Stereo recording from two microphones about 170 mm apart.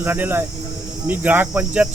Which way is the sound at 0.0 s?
10° right (ahead or behind).